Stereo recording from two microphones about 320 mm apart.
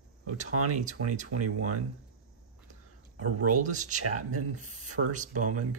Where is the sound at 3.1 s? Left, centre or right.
Right.